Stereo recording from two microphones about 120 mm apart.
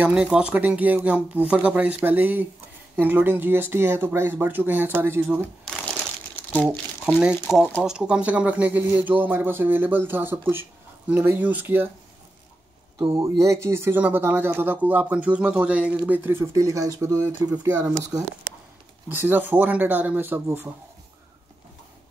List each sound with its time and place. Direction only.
0.0 s speech: 10° right (ahead or behind)
5.7 s crumpling: centre (ahead or behind)
6.6 s speech: 5° right (ahead or behind)
13.2 s speech: 25° right (ahead or behind)
19.1 s speech: 15° right (ahead or behind)